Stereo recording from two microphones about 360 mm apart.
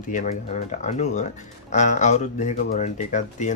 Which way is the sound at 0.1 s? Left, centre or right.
Left.